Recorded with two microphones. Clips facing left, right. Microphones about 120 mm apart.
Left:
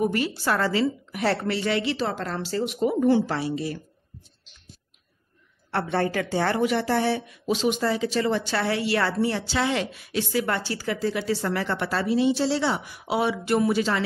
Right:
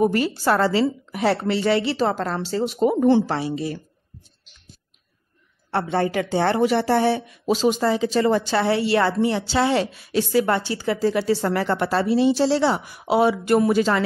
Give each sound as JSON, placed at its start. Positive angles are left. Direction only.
{"t": 0.0, "sound": "a woman's voice", "side_deg": -35}
{"t": 1.2, "sound": "a woman's voice", "side_deg": -15}
{"t": 1.5, "sound": "a woman's voice", "side_deg": -30}
{"t": 5.7, "sound": "speech", "side_deg": -20}
{"t": 7.5, "sound": "a woman's voice", "side_deg": -35}
{"t": 7.9, "sound": "speech", "side_deg": -25}
{"t": 8.2, "sound": "a woman's voice", "side_deg": -40}
{"t": 8.5, "sound": "speech", "side_deg": -30}
{"t": 9.6, "sound": "a woman's voice", "side_deg": -35}
{"t": 10.5, "sound": "speech", "side_deg": -25}
{"t": 11.0, "sound": "a woman's voice", "side_deg": -35}